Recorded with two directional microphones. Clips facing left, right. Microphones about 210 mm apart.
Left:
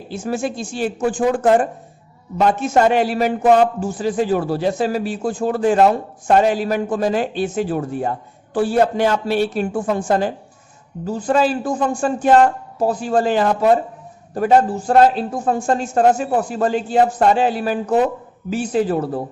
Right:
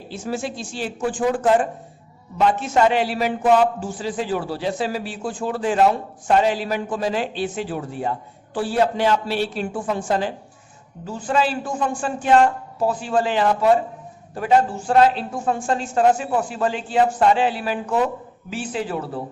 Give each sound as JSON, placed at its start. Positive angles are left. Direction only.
{"t": 0.1, "sound": "a man's voice", "side_deg": 50}